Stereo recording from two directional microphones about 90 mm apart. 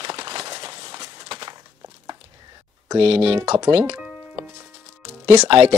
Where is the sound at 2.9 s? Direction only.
90° right.